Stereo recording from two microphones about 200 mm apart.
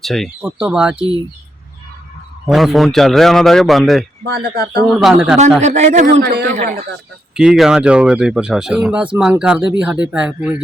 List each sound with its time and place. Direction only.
0.0 s speech: centre (ahead or behind)
2.5 s speech: centre (ahead or behind)
4.3 s speech: 55° right (ahead or behind)
5.0 s speech: 5° right (ahead or behind)
5.5 s a man's voice: 35° right (ahead or behind)
6.1 s speech: 50° right (ahead or behind)
6.5 s a man's voice: 40° right (ahead or behind)
7.3 s speech: centre (ahead or behind)